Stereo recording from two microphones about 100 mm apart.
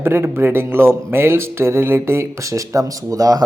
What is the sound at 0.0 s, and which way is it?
Speech, 20° right (ahead or behind).